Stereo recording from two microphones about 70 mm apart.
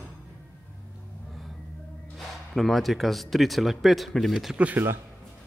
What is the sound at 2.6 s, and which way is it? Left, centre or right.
Speech, centre.